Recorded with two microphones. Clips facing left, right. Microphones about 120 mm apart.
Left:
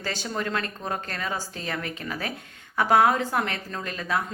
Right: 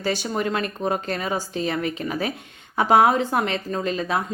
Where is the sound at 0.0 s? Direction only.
15° right (ahead or behind).